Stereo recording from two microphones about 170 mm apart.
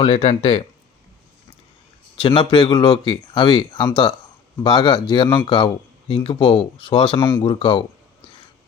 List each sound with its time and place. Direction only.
0.0 s speech: 30° left (ahead or behind)
2.2 s speech: 25° left (ahead or behind)
7.2 s speech: 15° left (ahead or behind)
7.4 s speech: 30° left (ahead or behind)